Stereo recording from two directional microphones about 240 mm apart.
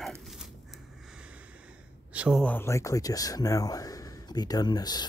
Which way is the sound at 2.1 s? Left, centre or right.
Centre.